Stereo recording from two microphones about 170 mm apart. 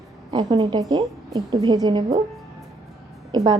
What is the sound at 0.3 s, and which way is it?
A woman's voice, 25° right (ahead or behind).